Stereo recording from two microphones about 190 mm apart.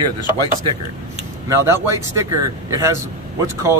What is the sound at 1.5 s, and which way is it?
A man's voice, 15° right (ahead or behind).